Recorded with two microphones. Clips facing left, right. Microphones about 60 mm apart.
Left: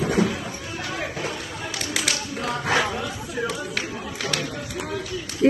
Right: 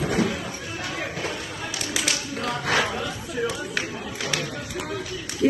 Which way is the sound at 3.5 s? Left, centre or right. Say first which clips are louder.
Even; centre.